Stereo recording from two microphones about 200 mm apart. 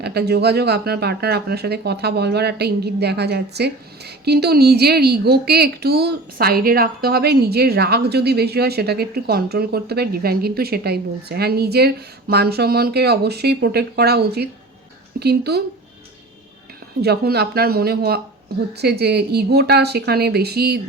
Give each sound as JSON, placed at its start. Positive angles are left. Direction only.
{"t": 0.0, "sound": "speech", "side_deg": -55}
{"t": 17.0, "sound": "speech", "side_deg": -55}